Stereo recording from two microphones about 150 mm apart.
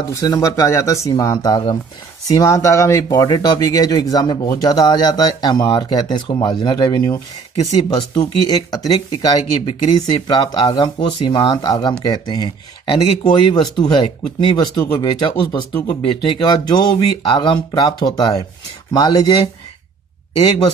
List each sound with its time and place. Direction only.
0.1 s speech: 20° left (ahead or behind)